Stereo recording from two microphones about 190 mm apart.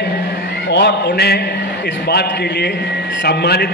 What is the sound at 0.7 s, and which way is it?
A man's voice, 65° left (ahead or behind).